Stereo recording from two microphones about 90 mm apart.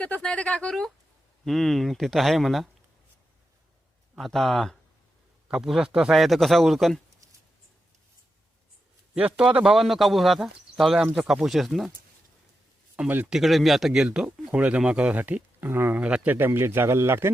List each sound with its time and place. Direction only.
0.0 s speech: 15° left (ahead or behind)
4.2 s speech: 5° left (ahead or behind)
9.1 s speech: 10° right (ahead or behind)
9.7 s speech: centre (ahead or behind)
13.0 s speech: 15° right (ahead or behind)
13.3 s speech: centre (ahead or behind); by 16.0 s 25° right (ahead or behind)
16.0 s a man's voice: 15° right (ahead or behind)